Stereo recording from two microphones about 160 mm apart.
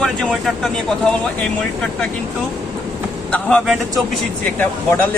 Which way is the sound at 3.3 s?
10° left (ahead or behind).